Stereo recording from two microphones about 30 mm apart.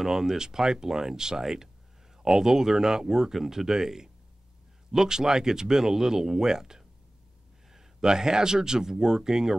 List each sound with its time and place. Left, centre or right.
0.0 s speech: centre